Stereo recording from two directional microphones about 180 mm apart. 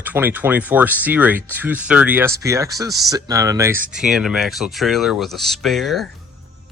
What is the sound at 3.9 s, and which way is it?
Speech, 5° right (ahead or behind).